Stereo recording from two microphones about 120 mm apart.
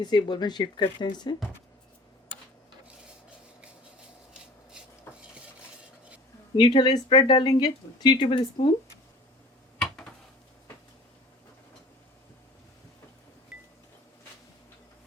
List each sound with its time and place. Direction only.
0.0 s speech: 35° left (ahead or behind)
5.1 s stir: 20° left (ahead or behind)
6.6 s speech: 35° left (ahead or behind)